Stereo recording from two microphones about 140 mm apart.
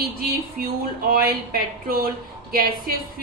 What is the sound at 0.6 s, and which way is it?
Speech, 90° right.